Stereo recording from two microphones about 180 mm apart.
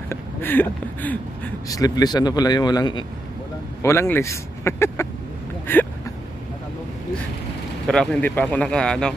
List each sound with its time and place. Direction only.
0.1 s speech: 10° left (ahead or behind)
1.7 s a man's voice: 20° left (ahead or behind)
7.8 s speech: centre (ahead or behind)